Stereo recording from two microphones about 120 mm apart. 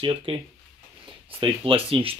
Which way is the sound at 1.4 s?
50° right (ahead or behind).